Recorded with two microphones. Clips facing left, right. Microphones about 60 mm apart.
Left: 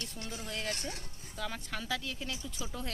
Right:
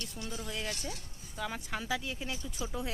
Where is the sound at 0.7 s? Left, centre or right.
Left.